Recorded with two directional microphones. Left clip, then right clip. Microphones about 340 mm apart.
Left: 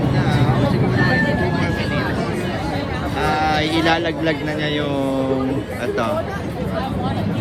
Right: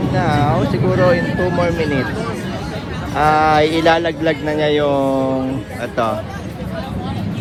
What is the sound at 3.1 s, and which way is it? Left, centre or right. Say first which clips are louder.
Speech: right 7 dB; centre.